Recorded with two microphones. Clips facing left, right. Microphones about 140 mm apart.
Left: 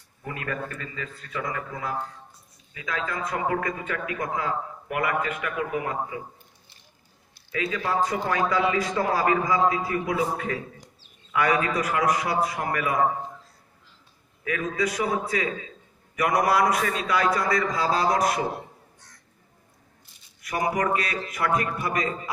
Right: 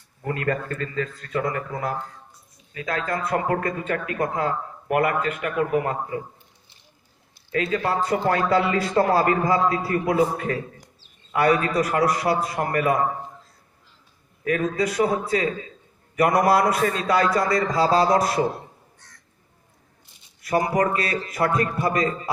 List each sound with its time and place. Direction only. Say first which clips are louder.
0.2 s speech: right 6 dB; 60° right (ahead or behind); by 2.0 s 40° right (ahead or behind)
2.7 s a man's voice: right 4 dB; 55° right (ahead or behind)
7.5 s speech: right 3 dB; 50° right (ahead or behind)
11.3 s a man's voice: right 4 dB; 35° right (ahead or behind)
14.4 s a man's voice: right 4 dB; 45° right (ahead or behind)
20.7 s a man's voice: right 3 dB; 35° right (ahead or behind)